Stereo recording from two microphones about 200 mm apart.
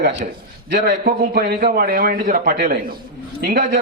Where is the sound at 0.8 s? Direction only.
40° right (ahead or behind).